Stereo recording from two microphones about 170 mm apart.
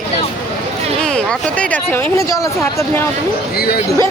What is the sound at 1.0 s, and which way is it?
Speech, 5° left (ahead or behind).